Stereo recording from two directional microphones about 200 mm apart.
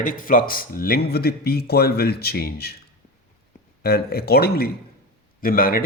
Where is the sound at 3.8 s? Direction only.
50° left (ahead or behind).